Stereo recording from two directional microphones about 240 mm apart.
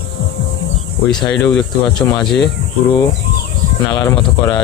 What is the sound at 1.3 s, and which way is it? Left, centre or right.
Speech, centre.